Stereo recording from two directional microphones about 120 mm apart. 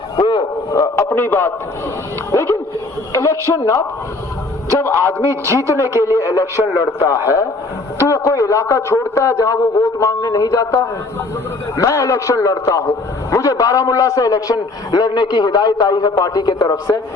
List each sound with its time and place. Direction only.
0.2 s a sound: 35° left (ahead or behind)
1.1 s a man's voice: 15° left (ahead or behind)
5.2 s a man's voice: 25° right (ahead or behind)
6.1 s a man's voice: 25° left (ahead or behind)